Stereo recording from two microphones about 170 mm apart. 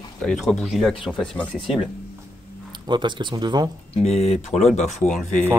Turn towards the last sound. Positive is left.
turn(degrees=0)  # may be behind; listen again after turning